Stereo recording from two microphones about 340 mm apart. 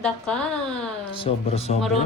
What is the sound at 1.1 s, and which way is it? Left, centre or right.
Speech, centre.